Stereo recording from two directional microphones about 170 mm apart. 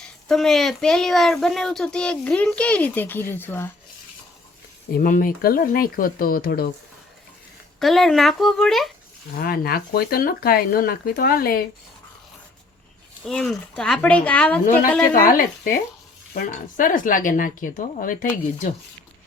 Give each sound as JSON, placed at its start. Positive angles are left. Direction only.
{"t": 0.0, "sound": "speech", "side_deg": 0}
{"t": 4.9, "sound": "speech", "side_deg": 55}
{"t": 7.8, "sound": "speech", "side_deg": 0}
{"t": 9.3, "sound": "speech", "side_deg": 60}
{"t": 13.2, "sound": "speech", "side_deg": 5}
{"t": 14.6, "sound": "speech", "side_deg": 55}